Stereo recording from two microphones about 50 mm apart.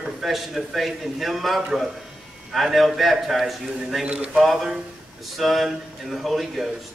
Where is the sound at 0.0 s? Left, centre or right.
Centre.